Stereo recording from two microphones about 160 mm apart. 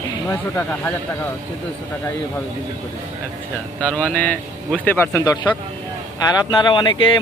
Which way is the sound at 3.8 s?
10° left (ahead or behind).